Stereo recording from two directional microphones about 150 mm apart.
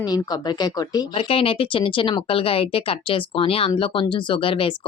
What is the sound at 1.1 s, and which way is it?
Speech, 40° left (ahead or behind).